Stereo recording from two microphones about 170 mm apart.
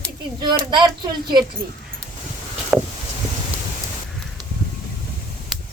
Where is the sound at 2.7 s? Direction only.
10° right (ahead or behind).